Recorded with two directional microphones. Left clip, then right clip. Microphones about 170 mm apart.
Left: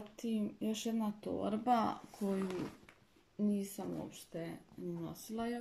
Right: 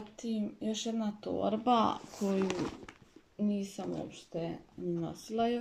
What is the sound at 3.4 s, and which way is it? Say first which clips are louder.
Speech: right 3 dB; centre (ahead or behind).